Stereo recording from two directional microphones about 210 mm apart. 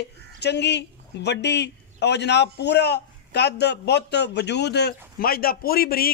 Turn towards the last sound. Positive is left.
turn(degrees=45)  # may be behind; listen again after turning